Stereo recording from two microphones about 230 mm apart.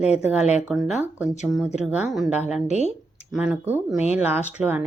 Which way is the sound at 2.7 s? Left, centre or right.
Right.